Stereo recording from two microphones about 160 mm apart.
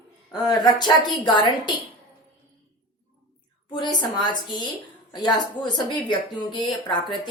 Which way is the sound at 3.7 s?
30° left (ahead or behind).